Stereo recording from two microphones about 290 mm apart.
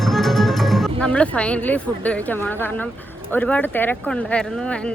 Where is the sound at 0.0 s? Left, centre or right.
Centre.